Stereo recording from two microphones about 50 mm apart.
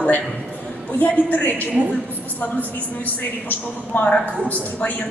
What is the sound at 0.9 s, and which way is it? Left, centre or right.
Speech, left.